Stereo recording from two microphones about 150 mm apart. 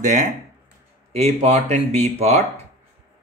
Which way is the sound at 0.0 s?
55° right (ahead or behind).